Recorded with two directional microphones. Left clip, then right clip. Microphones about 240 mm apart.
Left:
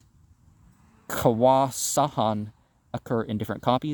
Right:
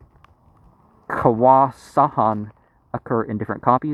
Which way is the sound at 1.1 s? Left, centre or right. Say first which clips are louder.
Right 6 dB; left.